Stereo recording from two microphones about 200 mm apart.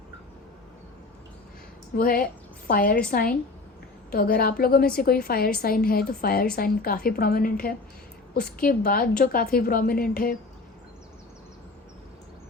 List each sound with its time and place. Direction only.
2.0 s a woman's voice: 45° left (ahead or behind)